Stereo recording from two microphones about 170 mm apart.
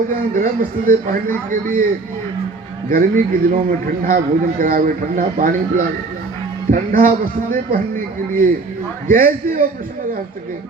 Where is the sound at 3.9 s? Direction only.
55° right (ahead or behind).